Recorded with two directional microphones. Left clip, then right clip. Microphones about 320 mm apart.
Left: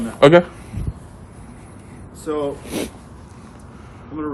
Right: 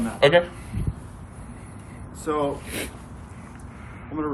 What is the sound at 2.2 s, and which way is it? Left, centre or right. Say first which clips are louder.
Speech: left 2 dB; centre.